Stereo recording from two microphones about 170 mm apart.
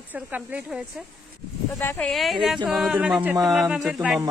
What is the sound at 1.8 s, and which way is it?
Speech, 15° left (ahead or behind).